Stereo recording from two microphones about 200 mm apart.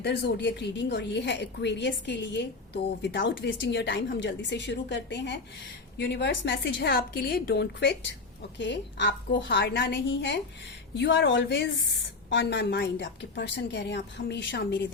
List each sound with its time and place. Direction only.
0.0 s a woman's voice: 60° left (ahead or behind)